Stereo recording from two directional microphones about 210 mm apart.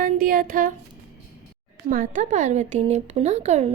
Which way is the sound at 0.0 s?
40° right (ahead or behind).